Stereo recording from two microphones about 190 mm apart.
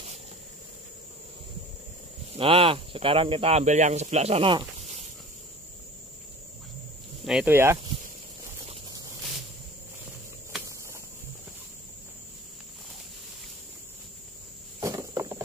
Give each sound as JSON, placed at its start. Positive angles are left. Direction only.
{"t": 2.3, "sound": "speech", "side_deg": -30}
{"t": 7.2, "sound": "speech", "side_deg": -5}
{"t": 14.8, "sound": "a sound", "side_deg": -15}